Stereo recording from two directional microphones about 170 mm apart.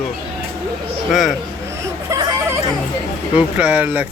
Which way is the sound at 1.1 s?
Centre (ahead or behind).